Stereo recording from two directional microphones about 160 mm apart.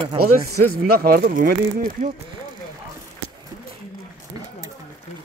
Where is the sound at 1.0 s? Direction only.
75° right (ahead or behind).